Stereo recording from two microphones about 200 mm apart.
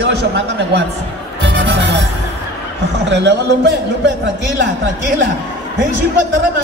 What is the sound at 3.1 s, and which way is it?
A man's voice, 60° right (ahead or behind).